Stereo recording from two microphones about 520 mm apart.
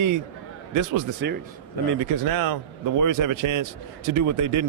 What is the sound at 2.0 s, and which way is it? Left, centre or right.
Speech, right.